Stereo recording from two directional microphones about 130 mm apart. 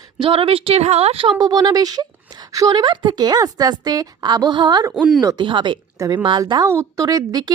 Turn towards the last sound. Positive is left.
turn(degrees=-30)  # may be behind; listen again after turning